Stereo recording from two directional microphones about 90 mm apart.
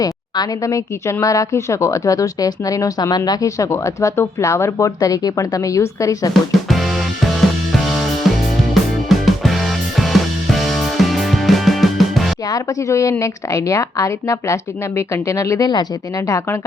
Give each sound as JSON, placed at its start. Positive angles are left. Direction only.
{"t": 0.0, "sound": "a woman's voice", "side_deg": 40}
{"t": 4.9, "sound": "a woman's voice", "side_deg": 45}
{"t": 6.7, "sound": "music", "side_deg": 0}
{"t": 12.5, "sound": "a woman's voice", "side_deg": 40}
{"t": 16.2, "sound": "a woman's voice", "side_deg": 35}